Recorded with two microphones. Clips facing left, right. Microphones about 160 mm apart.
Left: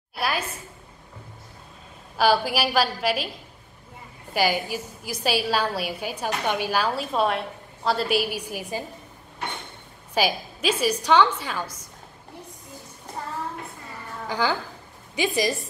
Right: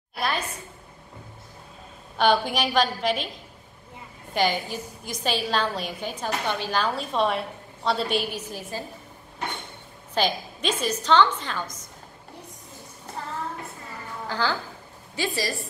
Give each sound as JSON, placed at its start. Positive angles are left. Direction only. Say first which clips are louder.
{"t": 0.2, "sound": "a woman's voice", "louder": "left 1 dB", "side_deg": 10}
{"t": 2.1, "sound": "a woman's voice", "louder": "left 1 dB", "side_deg": 5}
{"t": 4.3, "sound": "a woman's voice", "louder": "left 1 dB", "side_deg": 10}
{"t": 10.1, "sound": "a woman's voice", "louder": "left 1 dB", "side_deg": 10}
{"t": 14.2, "sound": "a woman's voice", "louder": "left 2 dB", "side_deg": 15}